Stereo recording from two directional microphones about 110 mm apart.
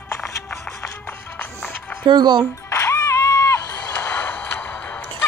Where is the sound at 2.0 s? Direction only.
40° right (ahead or behind).